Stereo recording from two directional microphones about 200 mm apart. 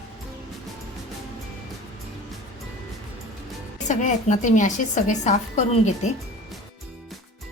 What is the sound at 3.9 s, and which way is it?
A woman's voice, 40° left (ahead or behind).